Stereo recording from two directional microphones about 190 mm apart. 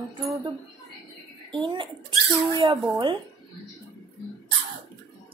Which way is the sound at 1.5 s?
25° right (ahead or behind).